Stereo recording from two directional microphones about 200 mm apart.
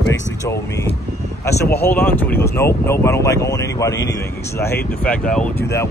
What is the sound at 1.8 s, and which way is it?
Speech, 10° left (ahead or behind).